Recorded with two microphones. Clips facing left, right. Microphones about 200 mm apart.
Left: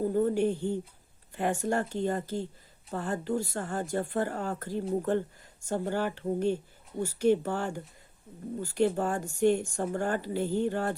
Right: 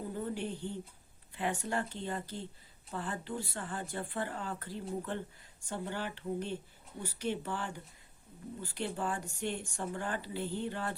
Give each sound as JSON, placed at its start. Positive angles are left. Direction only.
{"t": 0.1, "sound": "speech", "side_deg": 45}